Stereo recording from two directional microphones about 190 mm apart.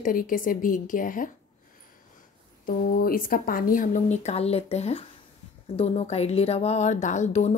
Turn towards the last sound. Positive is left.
turn(degrees=35)  # may be behind; listen again after turning